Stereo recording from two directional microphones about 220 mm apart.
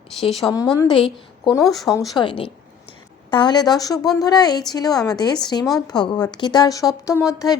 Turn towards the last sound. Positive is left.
turn(degrees=15)  # may be behind; listen again after turning